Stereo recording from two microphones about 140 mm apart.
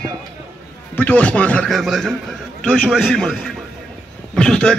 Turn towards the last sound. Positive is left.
turn(degrees=5)  # may be behind; listen again after turning